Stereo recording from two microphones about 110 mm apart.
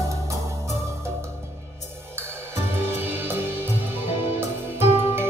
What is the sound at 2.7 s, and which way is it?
Music, 20° right (ahead or behind).